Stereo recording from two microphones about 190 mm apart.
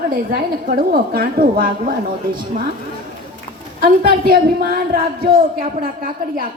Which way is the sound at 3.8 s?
45° right (ahead or behind).